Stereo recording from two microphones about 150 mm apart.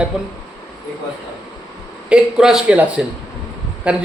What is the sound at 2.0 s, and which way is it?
A man's voice, 5° right (ahead or behind).